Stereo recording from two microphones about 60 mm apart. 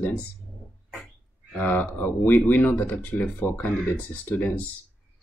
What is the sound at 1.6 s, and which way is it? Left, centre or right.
Speech, left.